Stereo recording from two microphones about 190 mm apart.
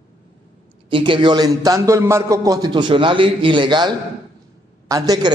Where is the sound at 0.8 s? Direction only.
25° right (ahead or behind).